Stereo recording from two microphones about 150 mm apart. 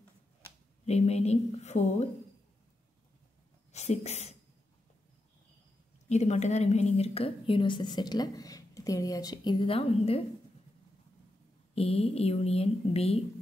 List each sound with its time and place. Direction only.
0.8 s a woman's voice: 45° left (ahead or behind)
3.7 s speech: 45° left (ahead or behind)
6.0 s a woman's voice: 50° left (ahead or behind)
11.7 s a woman's voice: 40° left (ahead or behind)